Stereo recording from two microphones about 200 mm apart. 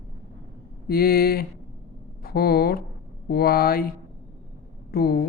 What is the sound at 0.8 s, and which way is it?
Speech, 50° left (ahead or behind).